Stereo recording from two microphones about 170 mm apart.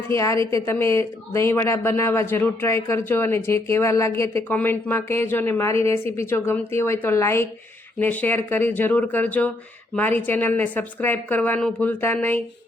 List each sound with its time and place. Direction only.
0.1 s a woman's voice: 15° left (ahead or behind)